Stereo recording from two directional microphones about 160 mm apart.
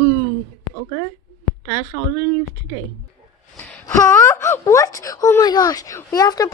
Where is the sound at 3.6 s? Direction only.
10° left (ahead or behind).